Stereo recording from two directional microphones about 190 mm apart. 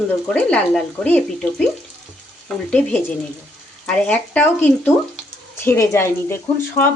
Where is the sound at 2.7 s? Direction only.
10° left (ahead or behind).